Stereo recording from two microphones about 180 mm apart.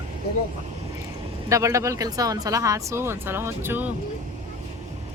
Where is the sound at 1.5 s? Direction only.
15° right (ahead or behind).